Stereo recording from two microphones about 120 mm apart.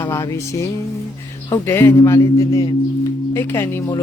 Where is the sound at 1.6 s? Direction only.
20° left (ahead or behind).